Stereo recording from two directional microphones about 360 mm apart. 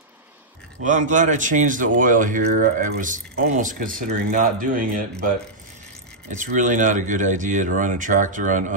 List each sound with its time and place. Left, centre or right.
0.8 s speech: right
6.2 s speech: right